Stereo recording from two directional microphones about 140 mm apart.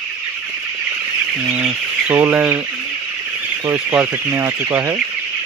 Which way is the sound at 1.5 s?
10° right (ahead or behind).